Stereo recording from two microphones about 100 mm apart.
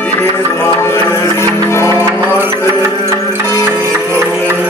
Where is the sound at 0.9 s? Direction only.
30° left (ahead or behind).